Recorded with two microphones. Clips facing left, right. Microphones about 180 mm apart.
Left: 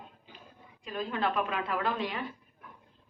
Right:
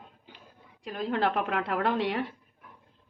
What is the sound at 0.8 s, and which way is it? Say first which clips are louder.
A woman's voice: right 4 dB; 70° right (ahead or behind).